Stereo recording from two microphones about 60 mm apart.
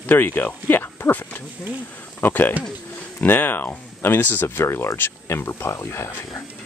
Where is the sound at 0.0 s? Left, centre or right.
Left.